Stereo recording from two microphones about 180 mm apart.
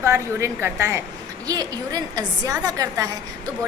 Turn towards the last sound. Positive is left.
turn(degrees=-20)  # may be behind; listen again after turning